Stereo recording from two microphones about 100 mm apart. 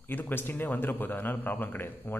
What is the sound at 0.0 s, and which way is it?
A man's voice, 20° left (ahead or behind).